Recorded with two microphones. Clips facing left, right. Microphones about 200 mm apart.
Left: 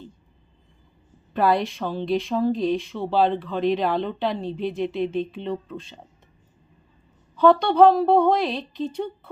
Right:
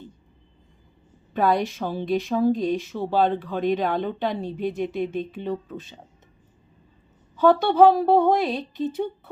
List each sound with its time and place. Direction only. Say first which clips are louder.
1.3 s speech: left 1 dB; centre (ahead or behind)
7.3 s speech: left 1 dB; 5° right (ahead or behind)